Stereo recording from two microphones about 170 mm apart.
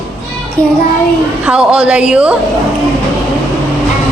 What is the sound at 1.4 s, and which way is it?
Speech, 5° right (ahead or behind).